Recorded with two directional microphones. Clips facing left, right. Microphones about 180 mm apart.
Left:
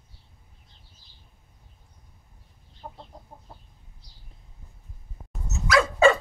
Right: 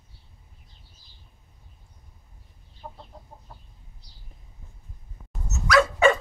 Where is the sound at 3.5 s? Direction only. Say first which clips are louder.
Even; 30° left (ahead or behind).